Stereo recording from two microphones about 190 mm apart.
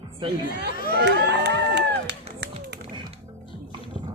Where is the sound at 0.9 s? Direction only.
60° right (ahead or behind).